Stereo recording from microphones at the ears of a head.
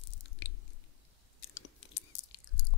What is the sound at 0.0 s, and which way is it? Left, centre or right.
Chewing, left.